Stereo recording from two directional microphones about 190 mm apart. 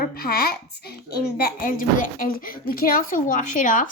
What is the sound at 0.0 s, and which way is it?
A woman's voice, 55° left (ahead or behind).